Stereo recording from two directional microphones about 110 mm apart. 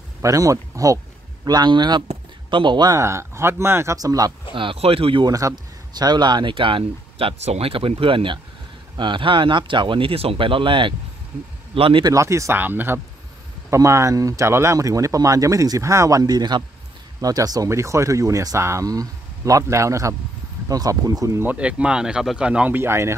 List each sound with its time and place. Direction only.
0.2 s speech: 30° right (ahead or behind); by 2.9 s 45° right (ahead or behind)
2.9 s speech: 25° right (ahead or behind)
4.6 s speech: 55° right (ahead or behind)
5.2 s speech: 30° right (ahead or behind); by 12.0 s 55° right (ahead or behind)
12.0 s speech: 30° right (ahead or behind)
21.4 s speech: 15° right (ahead or behind)